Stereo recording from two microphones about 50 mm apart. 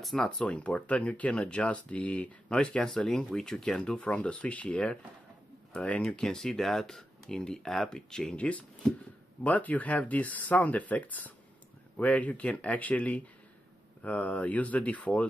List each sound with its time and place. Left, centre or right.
0.0 s speech: centre
0.4 s speech: left
5.7 s speech: left
6.3 s speech: centre; by 15.2 s left